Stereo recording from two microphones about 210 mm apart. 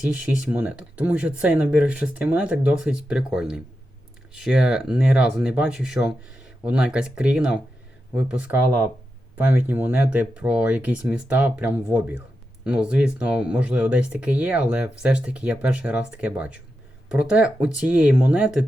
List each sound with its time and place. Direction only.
0.1 s speech: 5° right (ahead or behind)